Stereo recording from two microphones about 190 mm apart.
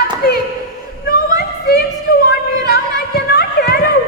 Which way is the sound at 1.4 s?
55° left (ahead or behind).